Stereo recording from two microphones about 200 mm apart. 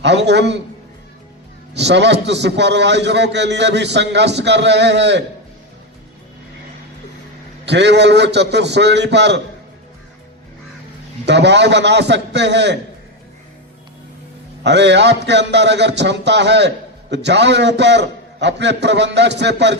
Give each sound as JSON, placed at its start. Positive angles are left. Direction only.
{"t": 0.0, "sound": "a man's voice", "side_deg": -60}
{"t": 1.7, "sound": "a man's voice", "side_deg": -60}
{"t": 7.6, "sound": "a man's voice", "side_deg": -60}
{"t": 11.3, "sound": "a man's voice", "side_deg": -60}
{"t": 14.6, "sound": "a man's voice", "side_deg": -60}